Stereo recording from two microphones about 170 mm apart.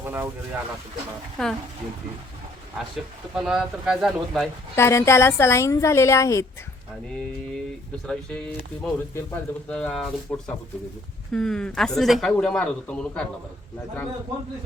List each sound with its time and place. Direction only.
0.0 s a sound: 15° right (ahead or behind)
1.4 s speech: 5° left (ahead or behind)
3.3 s speech: 5° right (ahead or behind)
4.7 s a woman's voice: 15° left (ahead or behind)
7.1 s speech: 5° left (ahead or behind)